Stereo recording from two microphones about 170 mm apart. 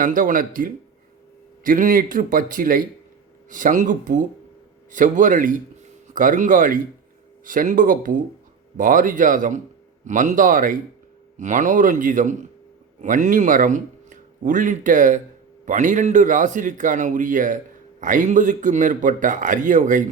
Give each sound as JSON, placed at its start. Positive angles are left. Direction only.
{"t": 0.0, "sound": "speech", "side_deg": -50}